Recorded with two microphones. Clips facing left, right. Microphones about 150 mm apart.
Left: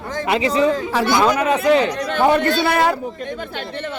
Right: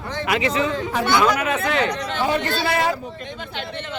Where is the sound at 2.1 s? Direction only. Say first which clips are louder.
Left 6 dB; 55° left (ahead or behind).